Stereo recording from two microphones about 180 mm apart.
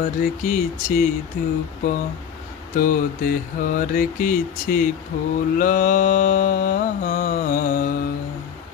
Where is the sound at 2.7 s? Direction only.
50° left (ahead or behind).